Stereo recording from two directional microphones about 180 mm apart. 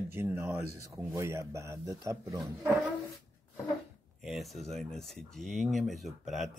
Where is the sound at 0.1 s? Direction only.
10° right (ahead or behind).